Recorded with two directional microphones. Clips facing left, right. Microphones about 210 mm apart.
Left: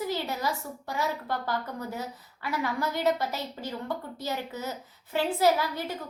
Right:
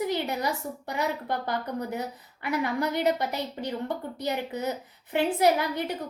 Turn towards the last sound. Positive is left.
turn(degrees=-20)  # may be behind; listen again after turning